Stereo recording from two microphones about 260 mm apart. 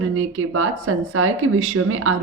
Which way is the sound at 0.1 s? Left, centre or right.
Right.